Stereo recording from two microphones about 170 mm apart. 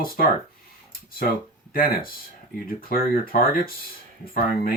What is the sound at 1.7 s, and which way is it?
Speech, 60° left (ahead or behind).